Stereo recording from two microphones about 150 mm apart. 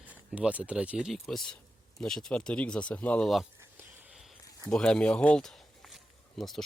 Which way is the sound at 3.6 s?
15° right (ahead or behind).